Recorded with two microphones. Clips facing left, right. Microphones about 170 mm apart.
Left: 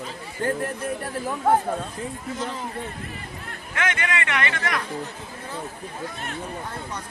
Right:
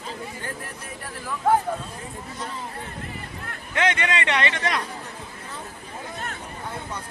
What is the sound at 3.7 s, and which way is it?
Speech, 25° right (ahead or behind).